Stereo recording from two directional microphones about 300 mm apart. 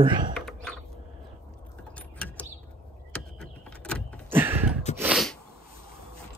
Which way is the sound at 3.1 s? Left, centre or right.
Centre.